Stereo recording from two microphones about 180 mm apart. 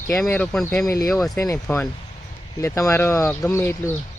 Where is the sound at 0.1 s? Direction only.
5° left (ahead or behind).